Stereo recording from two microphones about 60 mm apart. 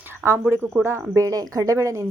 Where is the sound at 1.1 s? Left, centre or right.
Right.